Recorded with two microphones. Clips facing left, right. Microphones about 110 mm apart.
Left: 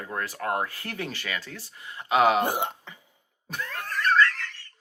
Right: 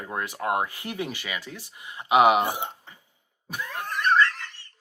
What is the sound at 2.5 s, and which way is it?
Speech, 65° left (ahead or behind).